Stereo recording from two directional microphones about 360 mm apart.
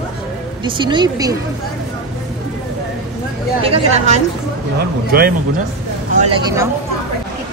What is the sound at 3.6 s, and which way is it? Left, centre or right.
A woman's voice, centre.